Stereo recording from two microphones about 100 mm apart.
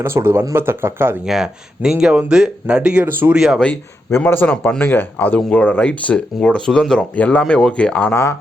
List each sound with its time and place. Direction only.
0.0 s speech: 25° right (ahead or behind)
1.2 s speech: 5° right (ahead or behind)
3.6 s speech: 15° left (ahead or behind)
8.1 s speech: 25° left (ahead or behind)